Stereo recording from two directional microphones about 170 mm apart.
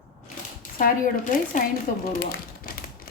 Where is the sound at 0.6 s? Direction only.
55° left (ahead or behind).